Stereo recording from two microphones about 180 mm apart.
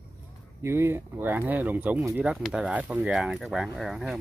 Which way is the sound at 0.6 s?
15° right (ahead or behind).